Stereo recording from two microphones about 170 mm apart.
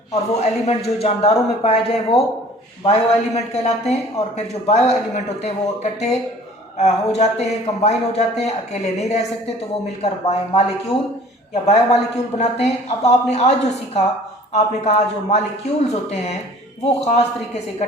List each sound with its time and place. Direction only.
0.1 s a man's voice: 40° left (ahead or behind)
11.6 s a man's voice: 40° left (ahead or behind)